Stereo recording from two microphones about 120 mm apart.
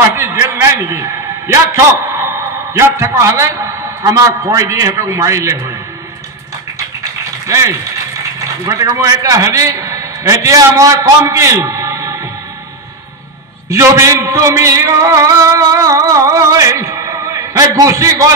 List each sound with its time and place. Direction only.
0.1 s a man's voice: 20° right (ahead or behind)
7.4 s a man's voice: 25° right (ahead or behind)
13.7 s a man's voice: 25° right (ahead or behind)